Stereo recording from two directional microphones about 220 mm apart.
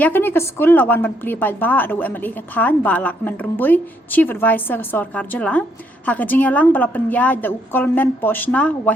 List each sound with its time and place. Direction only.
0.0 s a woman's voice: 10° left (ahead or behind)